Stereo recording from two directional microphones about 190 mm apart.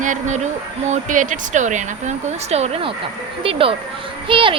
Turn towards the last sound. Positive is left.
turn(degrees=-25)  # may be behind; listen again after turning